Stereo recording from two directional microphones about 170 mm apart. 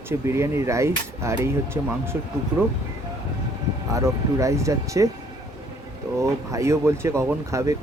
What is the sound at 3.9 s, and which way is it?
Speech, 20° right (ahead or behind).